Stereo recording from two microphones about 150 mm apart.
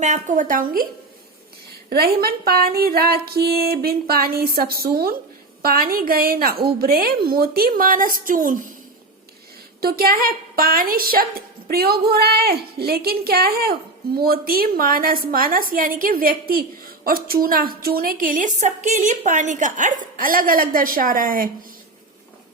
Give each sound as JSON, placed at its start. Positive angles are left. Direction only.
{"t": 0.0, "sound": "a woman's voice", "side_deg": -55}
{"t": 1.9, "sound": "a woman's voice", "side_deg": -90}
{"t": 9.8, "sound": "a woman's voice", "side_deg": -85}